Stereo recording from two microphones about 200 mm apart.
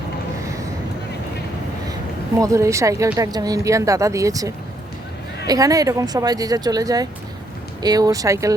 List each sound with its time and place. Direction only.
2.4 s speech: 15° right (ahead or behind)